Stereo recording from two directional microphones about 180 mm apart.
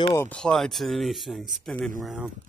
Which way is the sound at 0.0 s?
20° left (ahead or behind).